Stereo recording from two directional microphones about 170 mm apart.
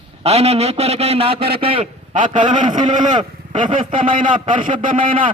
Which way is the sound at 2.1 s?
50° right (ahead or behind).